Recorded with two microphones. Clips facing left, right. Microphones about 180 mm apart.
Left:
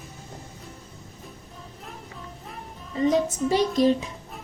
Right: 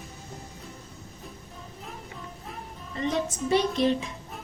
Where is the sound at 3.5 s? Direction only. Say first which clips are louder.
Left 2 dB; 40° left (ahead or behind).